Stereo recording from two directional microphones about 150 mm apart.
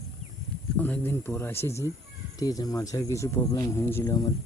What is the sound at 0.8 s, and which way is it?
Speech, 15° left (ahead or behind).